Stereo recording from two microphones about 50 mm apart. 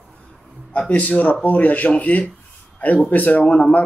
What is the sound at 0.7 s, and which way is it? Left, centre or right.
Speech, left.